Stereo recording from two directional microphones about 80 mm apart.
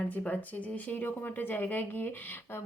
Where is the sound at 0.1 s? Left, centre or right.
Centre.